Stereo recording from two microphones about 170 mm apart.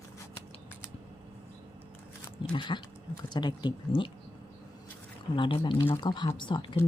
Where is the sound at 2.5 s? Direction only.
25° left (ahead or behind).